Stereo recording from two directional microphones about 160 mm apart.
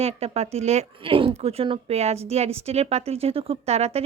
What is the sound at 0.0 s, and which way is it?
Speech, 40° right (ahead or behind).